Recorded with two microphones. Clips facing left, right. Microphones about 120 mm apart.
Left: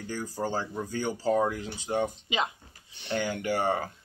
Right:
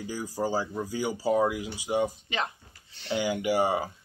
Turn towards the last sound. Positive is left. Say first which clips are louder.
# right 2 dB
turn(degrees=-10)  # may be behind; listen again after turning